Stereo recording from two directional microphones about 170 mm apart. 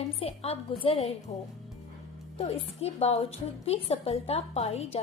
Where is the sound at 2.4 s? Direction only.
35° left (ahead or behind).